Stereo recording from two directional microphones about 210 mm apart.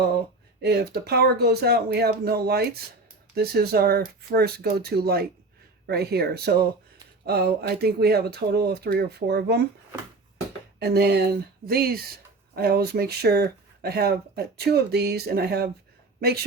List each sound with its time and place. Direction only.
0.6 s speech: 50° right (ahead or behind)
10.8 s speech: 50° right (ahead or behind)